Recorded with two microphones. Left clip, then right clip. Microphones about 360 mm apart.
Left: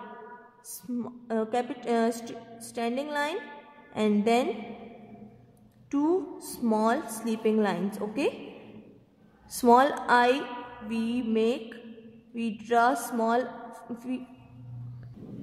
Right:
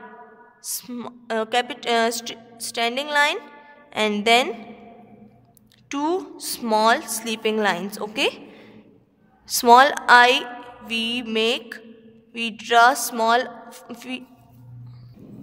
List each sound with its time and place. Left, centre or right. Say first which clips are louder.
0.7 s a woman's voice: right 4 dB; right
5.9 s a woman's voice: right 3 dB; right
9.6 s a woman's voice: right 8 dB; right